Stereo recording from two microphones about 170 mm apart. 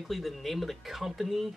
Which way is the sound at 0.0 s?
Centre (ahead or behind).